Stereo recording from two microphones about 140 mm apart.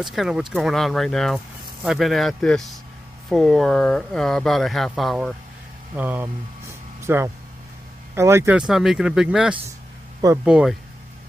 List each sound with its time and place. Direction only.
0.0 s speech: centre (ahead or behind)
5.9 s speech: 15° right (ahead or behind)
7.0 s a sound: 15° right (ahead or behind)
8.1 s speech: 20° right (ahead or behind)
8.5 s speech: 5° right (ahead or behind)